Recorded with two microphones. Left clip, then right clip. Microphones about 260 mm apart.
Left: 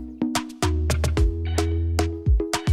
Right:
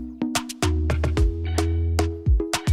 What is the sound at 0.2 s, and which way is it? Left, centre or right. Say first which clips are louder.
Music: even; centre.